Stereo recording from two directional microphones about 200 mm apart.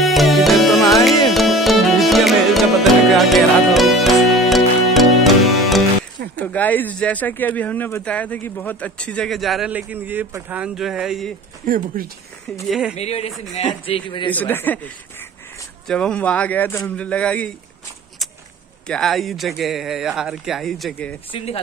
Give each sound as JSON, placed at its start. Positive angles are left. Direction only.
{"t": 0.0, "sound": "music", "side_deg": 0}
{"t": 6.3, "sound": "speech", "side_deg": 10}
{"t": 11.6, "sound": "speech", "side_deg": -45}
{"t": 12.6, "sound": "speech", "side_deg": 0}
{"t": 12.9, "sound": "speech", "side_deg": 30}
{"t": 14.3, "sound": "a man's voice", "side_deg": 10}
{"t": 18.9, "sound": "speech", "side_deg": 0}